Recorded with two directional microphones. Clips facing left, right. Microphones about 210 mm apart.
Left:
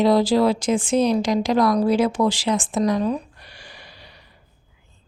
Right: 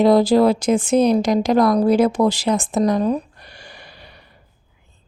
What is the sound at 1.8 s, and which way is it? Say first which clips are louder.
Speech: right 3 dB; 40° right (ahead or behind).